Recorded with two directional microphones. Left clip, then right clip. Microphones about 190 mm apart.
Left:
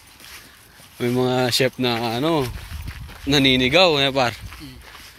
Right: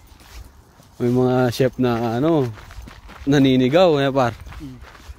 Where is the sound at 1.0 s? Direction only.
25° right (ahead or behind).